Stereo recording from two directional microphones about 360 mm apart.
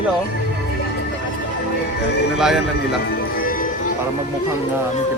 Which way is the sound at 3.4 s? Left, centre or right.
Left.